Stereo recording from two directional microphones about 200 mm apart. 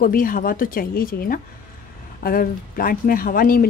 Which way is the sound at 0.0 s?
45° left (ahead or behind).